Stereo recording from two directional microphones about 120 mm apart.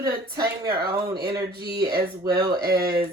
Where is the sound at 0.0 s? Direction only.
30° right (ahead or behind).